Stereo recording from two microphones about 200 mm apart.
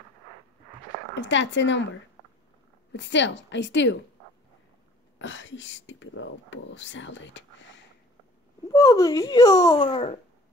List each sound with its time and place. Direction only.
1.1 s a woman's voice: 65° left (ahead or behind)
2.9 s a woman's voice: 65° left (ahead or behind)
5.2 s speech: 70° left (ahead or behind)
8.6 s a child's voice: 15° left (ahead or behind)